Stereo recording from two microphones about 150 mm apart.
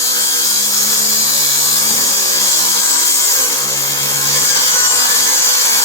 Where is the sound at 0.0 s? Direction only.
20° left (ahead or behind).